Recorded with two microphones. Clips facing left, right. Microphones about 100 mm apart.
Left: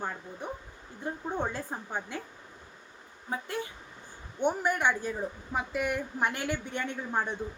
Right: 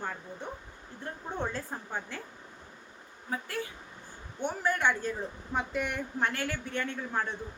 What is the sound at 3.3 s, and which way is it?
A woman's voice, 20° left (ahead or behind).